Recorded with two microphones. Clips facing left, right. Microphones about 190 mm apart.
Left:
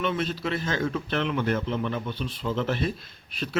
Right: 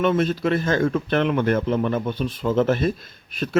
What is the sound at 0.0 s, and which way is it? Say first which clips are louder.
Speech: right 8 dB; 50° right (ahead or behind).